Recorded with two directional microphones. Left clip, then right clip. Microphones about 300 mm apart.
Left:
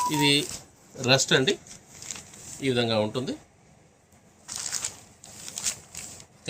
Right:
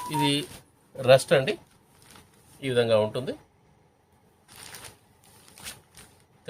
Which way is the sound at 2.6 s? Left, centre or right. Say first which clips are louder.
Right 3 dB; right.